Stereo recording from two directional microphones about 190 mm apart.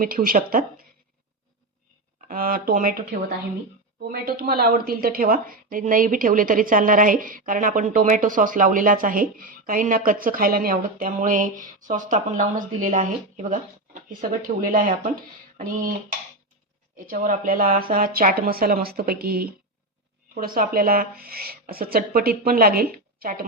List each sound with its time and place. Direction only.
0.0 s speech: 50° right (ahead or behind)
2.2 s speech: 50° right (ahead or behind)
17.1 s speech: 50° right (ahead or behind)